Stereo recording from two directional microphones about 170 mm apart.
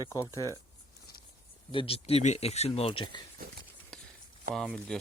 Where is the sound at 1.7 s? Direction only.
30° left (ahead or behind).